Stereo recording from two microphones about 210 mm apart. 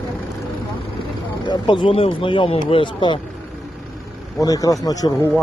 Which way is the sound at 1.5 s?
20° left (ahead or behind).